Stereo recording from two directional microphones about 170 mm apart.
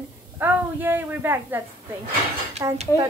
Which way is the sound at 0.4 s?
10° right (ahead or behind).